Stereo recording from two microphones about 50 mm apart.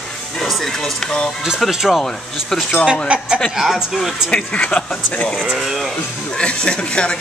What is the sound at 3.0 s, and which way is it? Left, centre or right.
Speech, centre.